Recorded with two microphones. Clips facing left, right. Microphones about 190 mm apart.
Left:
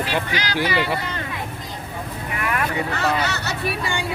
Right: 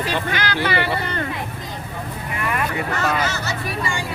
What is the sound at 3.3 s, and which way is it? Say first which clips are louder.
Speech: left 1 dB; 65° left (ahead or behind).